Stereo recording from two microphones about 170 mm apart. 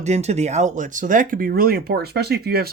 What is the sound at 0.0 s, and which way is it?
Speech, 40° right (ahead or behind).